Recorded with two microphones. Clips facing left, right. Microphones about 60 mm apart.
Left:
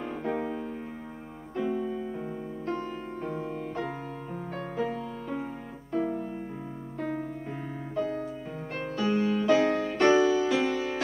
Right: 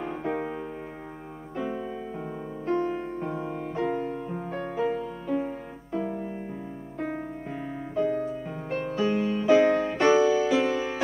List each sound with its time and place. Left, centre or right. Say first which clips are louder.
0.0 s music: right 1 dB; centre
1.6 s keyboard: left 2 dB; centre
2.7 s music: right 8 dB; right
3.2 s music: right 2 dB; centre
7.0 s music: right 1 dB; right
7.9 s music: right 5 dB; centre